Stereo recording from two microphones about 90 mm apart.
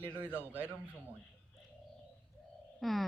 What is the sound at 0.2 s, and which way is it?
Speech, 20° right (ahead or behind).